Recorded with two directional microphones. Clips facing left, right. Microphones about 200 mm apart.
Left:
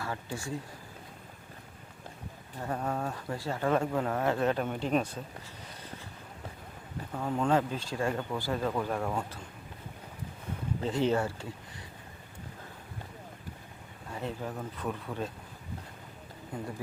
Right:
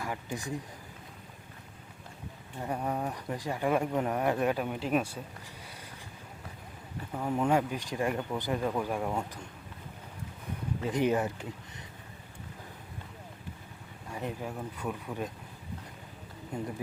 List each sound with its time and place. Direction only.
0.0 s speech: 15° right (ahead or behind)
2.6 s speech: 15° right (ahead or behind)
7.1 s speech: 10° right (ahead or behind)
10.8 s speech: 15° right (ahead or behind)
14.1 s speech: 15° right (ahead or behind)
16.5 s speech: 25° right (ahead or behind)